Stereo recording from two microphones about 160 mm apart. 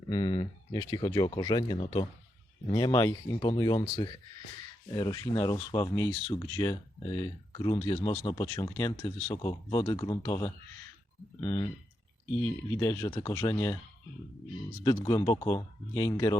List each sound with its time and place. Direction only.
0.1 s speech: 30° left (ahead or behind)
12.8 s speech: 20° left (ahead or behind)
14.8 s speech: 25° left (ahead or behind)